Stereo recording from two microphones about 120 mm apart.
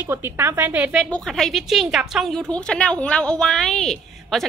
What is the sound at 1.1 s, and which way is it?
A woman's voice, 5° left (ahead or behind).